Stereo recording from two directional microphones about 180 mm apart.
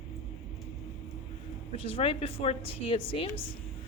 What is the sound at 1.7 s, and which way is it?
Speech, 30° left (ahead or behind).